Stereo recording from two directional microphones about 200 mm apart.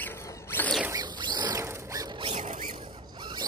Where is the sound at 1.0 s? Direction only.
20° right (ahead or behind); by 2.8 s 40° right (ahead or behind).